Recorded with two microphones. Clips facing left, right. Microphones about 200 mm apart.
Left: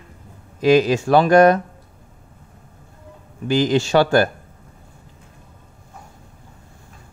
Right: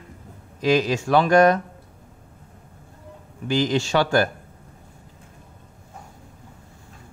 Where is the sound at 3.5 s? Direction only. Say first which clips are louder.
Left 4 dB; 40° left (ahead or behind).